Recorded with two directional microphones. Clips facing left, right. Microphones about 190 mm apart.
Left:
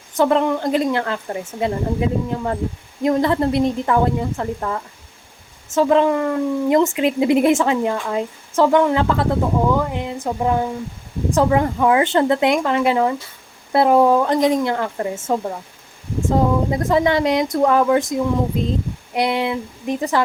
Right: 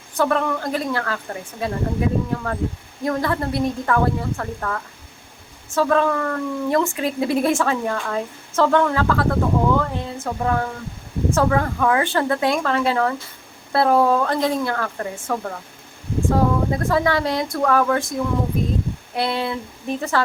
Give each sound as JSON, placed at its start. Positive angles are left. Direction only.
{"t": 0.2, "sound": "speech", "side_deg": 20}